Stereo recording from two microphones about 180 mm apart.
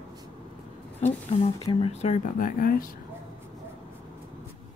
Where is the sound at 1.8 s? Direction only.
40° left (ahead or behind).